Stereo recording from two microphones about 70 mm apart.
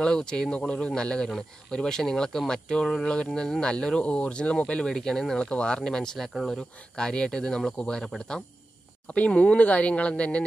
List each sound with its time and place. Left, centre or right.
0.0 s speech: centre
7.0 s speech: centre